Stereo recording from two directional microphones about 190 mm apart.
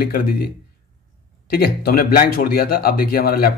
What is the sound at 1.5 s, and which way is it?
A man's voice, 55° left (ahead or behind).